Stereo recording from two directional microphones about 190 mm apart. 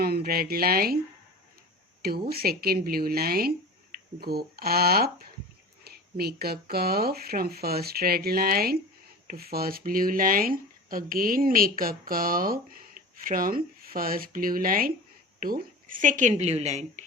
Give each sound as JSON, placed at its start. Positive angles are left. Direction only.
{"t": 0.0, "sound": "speech", "side_deg": -55}
{"t": 2.0, "sound": "speech", "side_deg": -55}